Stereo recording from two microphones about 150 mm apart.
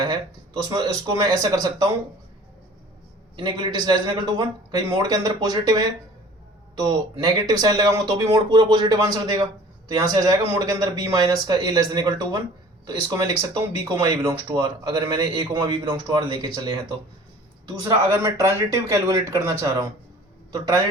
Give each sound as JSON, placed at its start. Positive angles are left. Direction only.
{"t": 0.0, "sound": "speech", "side_deg": -25}
{"t": 3.3, "sound": "speech", "side_deg": -30}